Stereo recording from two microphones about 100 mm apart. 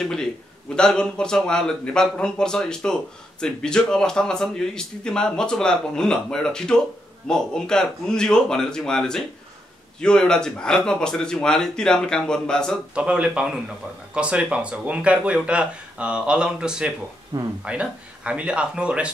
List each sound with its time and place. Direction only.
0.7 s speech: 10° left (ahead or behind)
12.9 s speech: 10° right (ahead or behind)
17.3 s speech: 40° right (ahead or behind)
17.6 s speech: 10° right (ahead or behind)